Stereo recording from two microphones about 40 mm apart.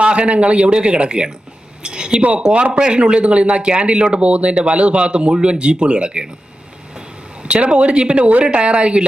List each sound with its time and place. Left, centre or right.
0.0 s speech: right
7.4 s speech: right